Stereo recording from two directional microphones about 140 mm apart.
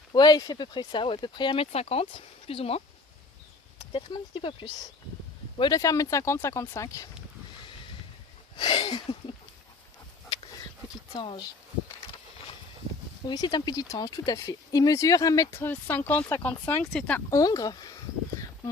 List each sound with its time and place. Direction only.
0.1 s speech: 30° left (ahead or behind)
1.7 s speech: 45° left (ahead or behind); by 7.1 s 25° left (ahead or behind)
8.5 s speech: 35° left (ahead or behind)
11.1 s speech: 35° left (ahead or behind)
13.2 s speech: 30° left (ahead or behind); by 17.2 s 5° left (ahead or behind)
17.2 s speech: 25° left (ahead or behind)